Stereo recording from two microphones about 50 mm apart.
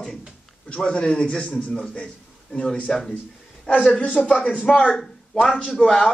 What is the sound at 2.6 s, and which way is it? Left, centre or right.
Speech, centre.